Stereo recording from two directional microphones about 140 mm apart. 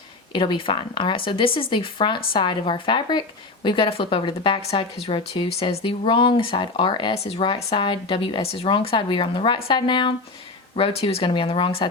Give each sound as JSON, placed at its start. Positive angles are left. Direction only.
{"t": 0.3, "sound": "speech", "side_deg": 35}